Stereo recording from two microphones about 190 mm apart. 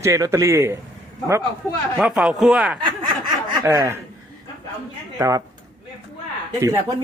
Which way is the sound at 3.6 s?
15° right (ahead or behind).